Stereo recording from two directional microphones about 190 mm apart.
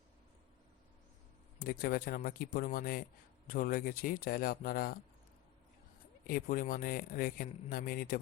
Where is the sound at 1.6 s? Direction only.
50° left (ahead or behind).